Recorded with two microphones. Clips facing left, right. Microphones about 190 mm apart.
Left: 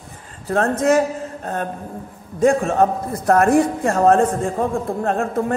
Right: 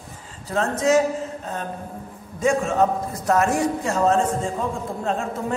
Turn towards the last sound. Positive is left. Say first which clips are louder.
# left 5 dB
turn(degrees=55)  # may be behind; listen again after turning